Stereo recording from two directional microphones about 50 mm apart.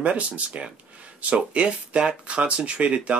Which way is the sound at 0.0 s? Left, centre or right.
Right.